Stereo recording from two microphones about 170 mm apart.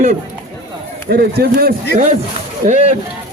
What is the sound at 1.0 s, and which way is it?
Speech, 70° right (ahead or behind).